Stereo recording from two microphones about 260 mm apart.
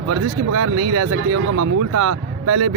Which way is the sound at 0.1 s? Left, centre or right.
Right.